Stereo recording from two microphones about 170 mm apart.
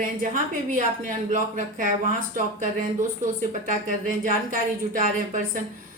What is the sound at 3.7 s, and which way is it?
A woman's voice, 50° right (ahead or behind).